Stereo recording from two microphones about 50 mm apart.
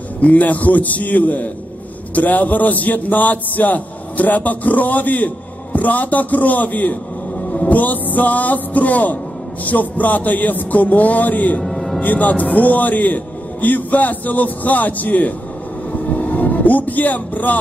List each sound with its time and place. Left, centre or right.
0.2 s a man's voice: left
11.6 s music: centre
12.0 s a man's voice: left
16.0 s vehicle: left